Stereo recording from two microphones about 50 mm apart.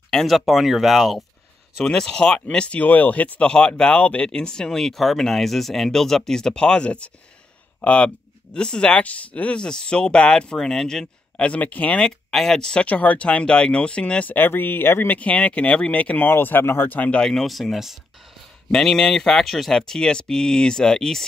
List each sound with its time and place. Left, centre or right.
0.1 s speech: centre
1.9 s speech: centre
2.8 s speech: left
3.4 s speech: centre
11.4 s speech: left
12.0 s speech: centre
12.8 s speech: left
14.3 s speech: left
15.0 s speech: left
16.3 s speech: left
16.9 s speech: left
17.2 s speech: centre
18.7 s speech: centre
19.8 s speech: centre